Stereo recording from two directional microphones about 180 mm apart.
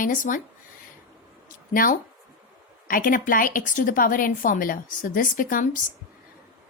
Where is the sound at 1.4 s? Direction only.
50° left (ahead or behind).